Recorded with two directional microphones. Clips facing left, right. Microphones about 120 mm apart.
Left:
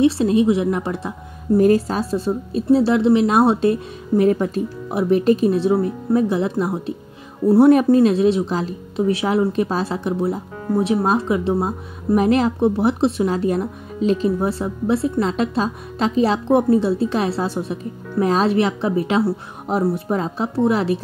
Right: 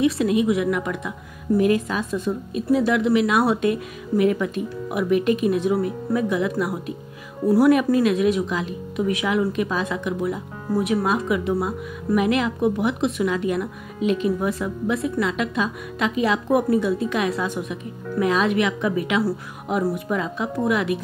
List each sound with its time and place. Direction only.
0.0 s speech: 30° left (ahead or behind)